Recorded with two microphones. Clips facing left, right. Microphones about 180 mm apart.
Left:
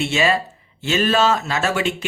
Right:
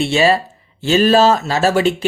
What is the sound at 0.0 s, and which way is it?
Speech, 30° right (ahead or behind).